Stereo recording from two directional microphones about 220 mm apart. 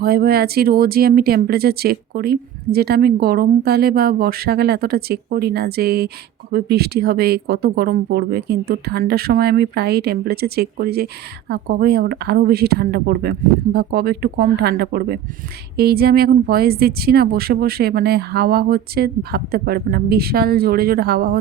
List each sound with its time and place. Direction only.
0.0 s speech: 45° right (ahead or behind)